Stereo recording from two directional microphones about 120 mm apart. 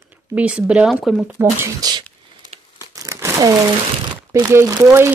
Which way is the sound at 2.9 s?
25° right (ahead or behind).